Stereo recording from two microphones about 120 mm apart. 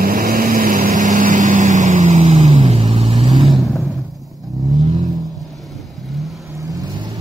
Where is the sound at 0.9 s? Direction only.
90° right; by 3.2 s 55° right (ahead or behind).